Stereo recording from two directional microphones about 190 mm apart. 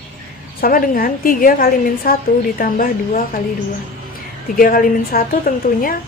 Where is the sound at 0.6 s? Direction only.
50° left (ahead or behind).